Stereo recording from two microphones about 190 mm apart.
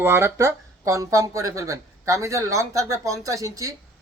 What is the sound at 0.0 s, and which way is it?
Speech, 15° right (ahead or behind).